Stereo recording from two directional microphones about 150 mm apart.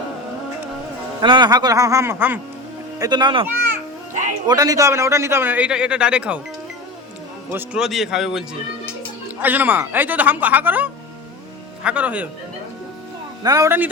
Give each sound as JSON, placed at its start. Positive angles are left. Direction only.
{"t": 1.2, "sound": "speech", "side_deg": -30}
{"t": 3.0, "sound": "speech", "side_deg": -30}
{"t": 4.4, "sound": "a man's voice", "side_deg": -25}
{"t": 7.5, "sound": "a man's voice", "side_deg": -5}
{"t": 13.4, "sound": "speech", "side_deg": -25}